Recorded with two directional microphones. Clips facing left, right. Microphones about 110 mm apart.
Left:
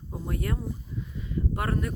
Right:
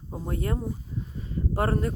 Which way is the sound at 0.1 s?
25° right (ahead or behind).